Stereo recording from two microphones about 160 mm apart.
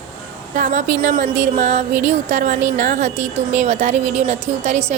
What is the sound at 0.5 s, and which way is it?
A woman's voice, 50° right (ahead or behind).